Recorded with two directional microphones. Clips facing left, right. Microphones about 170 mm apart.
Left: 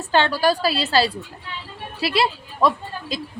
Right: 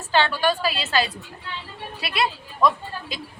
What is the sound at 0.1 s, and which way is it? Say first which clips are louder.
A woman's voice: left 2 dB; 40° left (ahead or behind).